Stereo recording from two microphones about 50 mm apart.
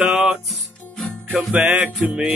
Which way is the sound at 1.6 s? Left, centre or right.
Right.